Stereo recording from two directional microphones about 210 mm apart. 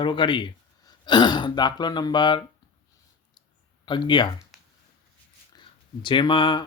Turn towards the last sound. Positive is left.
turn(degrees=20)  # may be behind; listen again after turning